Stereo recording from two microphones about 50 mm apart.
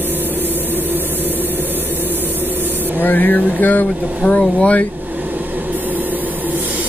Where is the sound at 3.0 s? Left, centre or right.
Left.